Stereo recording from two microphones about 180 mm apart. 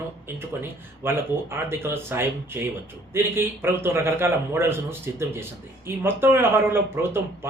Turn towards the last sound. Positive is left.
turn(degrees=-10)  # may be behind; listen again after turning